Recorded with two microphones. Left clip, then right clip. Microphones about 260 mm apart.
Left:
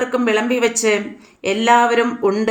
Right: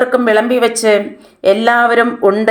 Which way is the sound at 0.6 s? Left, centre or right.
Centre.